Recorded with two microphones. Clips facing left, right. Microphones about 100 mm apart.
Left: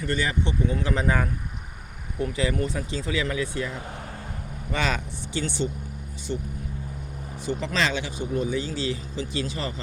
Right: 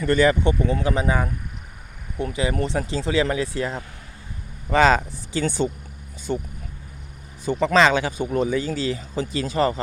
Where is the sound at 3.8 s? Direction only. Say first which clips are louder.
Left 7 dB; 50° left (ahead or behind).